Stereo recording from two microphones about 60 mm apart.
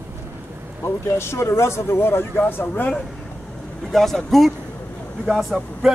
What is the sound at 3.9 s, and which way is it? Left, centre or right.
Speech, centre.